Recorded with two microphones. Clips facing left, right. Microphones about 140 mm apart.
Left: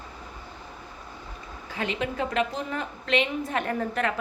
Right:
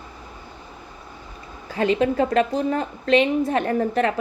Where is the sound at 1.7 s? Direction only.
35° right (ahead or behind).